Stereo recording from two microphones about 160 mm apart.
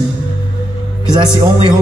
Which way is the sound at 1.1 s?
25° right (ahead or behind).